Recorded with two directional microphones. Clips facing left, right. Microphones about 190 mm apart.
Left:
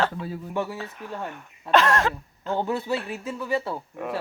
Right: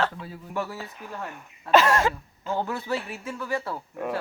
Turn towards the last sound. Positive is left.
turn(degrees=0)  # may be behind; listen again after turning